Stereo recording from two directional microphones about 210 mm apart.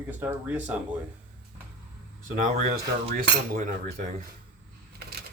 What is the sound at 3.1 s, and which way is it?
Cutlery, 40° right (ahead or behind).